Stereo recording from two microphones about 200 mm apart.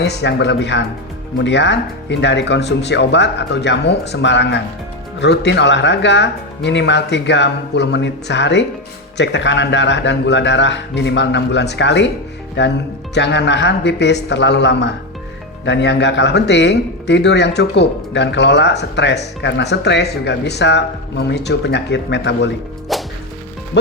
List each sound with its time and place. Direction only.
0.0 s speech: 60° left (ahead or behind)
22.9 s whip: centre (ahead or behind)